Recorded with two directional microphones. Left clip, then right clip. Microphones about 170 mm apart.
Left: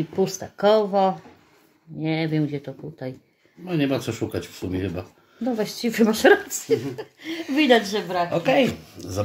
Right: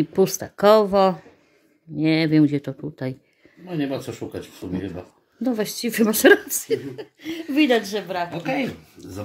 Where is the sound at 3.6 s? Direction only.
40° left (ahead or behind).